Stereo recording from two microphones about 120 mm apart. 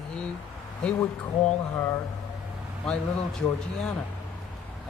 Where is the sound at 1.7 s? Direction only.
20° left (ahead or behind).